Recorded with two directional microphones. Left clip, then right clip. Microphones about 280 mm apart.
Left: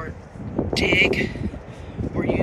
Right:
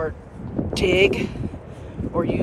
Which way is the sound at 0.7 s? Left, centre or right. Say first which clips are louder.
Right 1 dB; centre.